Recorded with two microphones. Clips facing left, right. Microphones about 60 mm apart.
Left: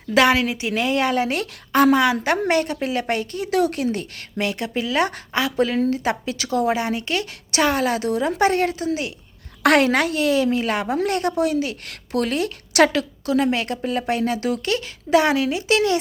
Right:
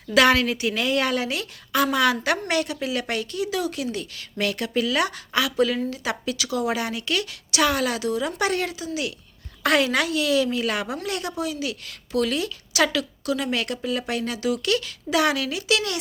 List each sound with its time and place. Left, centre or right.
0.3 s a woman's voice: centre; by 2.0 s left
2.0 s a woman's voice: left
4.4 s a woman's voice: left
11.0 s a woman's voice: left